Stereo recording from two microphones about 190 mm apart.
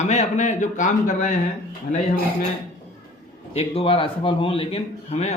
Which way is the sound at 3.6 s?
30° left (ahead or behind).